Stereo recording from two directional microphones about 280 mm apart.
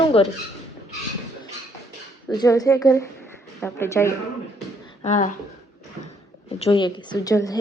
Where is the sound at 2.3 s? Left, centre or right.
Centre.